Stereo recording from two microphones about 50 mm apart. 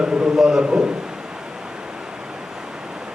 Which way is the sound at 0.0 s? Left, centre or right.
Centre.